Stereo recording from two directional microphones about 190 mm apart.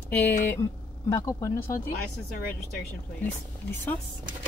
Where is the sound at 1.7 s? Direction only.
50° left (ahead or behind).